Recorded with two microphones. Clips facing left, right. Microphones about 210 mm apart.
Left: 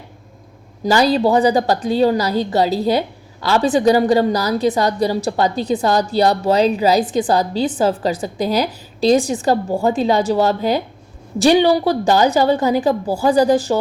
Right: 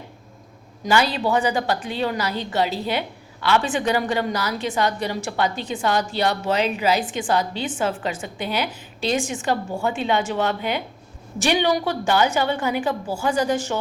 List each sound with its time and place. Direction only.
0.9 s a woman's voice: 35° left (ahead or behind)